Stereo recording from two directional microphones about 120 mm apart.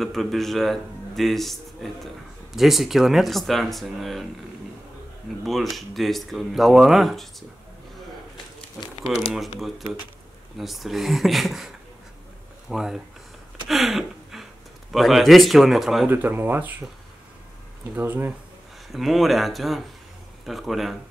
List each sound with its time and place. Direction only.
0.0 s a man's voice: centre (ahead or behind)
5.4 s a man's voice: centre (ahead or behind)
10.6 s a man's voice: centre (ahead or behind)
16.1 s speech: 15° right (ahead or behind)
17.9 s speech: 15° right (ahead or behind)
18.9 s a man's voice: centre (ahead or behind)